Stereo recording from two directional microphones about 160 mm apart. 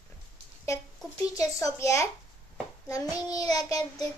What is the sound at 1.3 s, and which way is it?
Child singing, 20° left (ahead or behind).